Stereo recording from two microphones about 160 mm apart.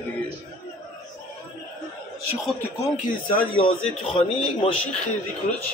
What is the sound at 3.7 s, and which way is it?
A man's voice, 35° left (ahead or behind).